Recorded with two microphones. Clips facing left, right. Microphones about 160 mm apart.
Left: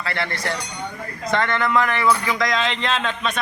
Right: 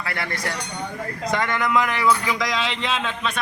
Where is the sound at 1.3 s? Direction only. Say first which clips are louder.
Left 2 dB; 10° right (ahead or behind).